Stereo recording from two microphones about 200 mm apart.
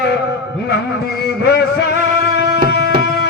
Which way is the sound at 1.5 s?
50° left (ahead or behind).